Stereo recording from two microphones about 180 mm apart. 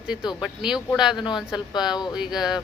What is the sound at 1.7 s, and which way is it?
Speech, 25° left (ahead or behind).